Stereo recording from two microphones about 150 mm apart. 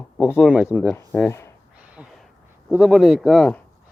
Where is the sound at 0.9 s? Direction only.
15° left (ahead or behind).